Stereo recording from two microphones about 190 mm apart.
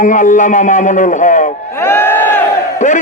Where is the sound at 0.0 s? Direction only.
40° left (ahead or behind).